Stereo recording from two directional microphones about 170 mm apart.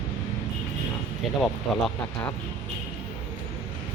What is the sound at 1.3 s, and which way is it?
Speech, centre (ahead or behind).